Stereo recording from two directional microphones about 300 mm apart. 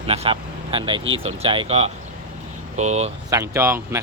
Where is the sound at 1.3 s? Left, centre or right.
Centre.